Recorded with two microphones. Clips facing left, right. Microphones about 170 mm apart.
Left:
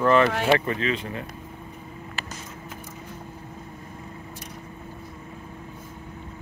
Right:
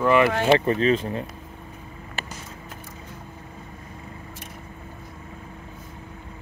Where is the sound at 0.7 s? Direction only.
35° right (ahead or behind).